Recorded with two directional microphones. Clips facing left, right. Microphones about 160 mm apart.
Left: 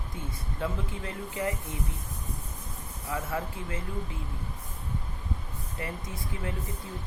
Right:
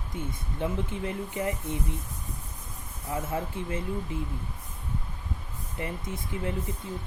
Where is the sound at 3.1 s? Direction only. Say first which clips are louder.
Right 2 dB; 25° right (ahead or behind).